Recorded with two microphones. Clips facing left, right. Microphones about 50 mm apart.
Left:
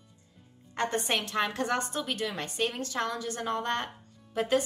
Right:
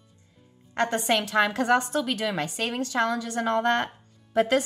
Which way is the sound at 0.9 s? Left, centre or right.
Right.